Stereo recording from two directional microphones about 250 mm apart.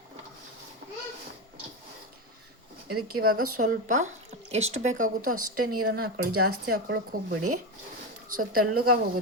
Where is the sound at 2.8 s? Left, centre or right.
Right.